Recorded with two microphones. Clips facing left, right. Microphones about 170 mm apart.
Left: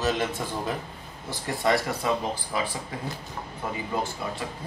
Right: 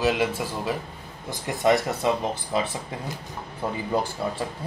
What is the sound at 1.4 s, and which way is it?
Speech, 20° right (ahead or behind).